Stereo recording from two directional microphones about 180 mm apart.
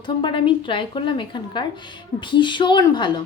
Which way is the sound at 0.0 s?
25° left (ahead or behind).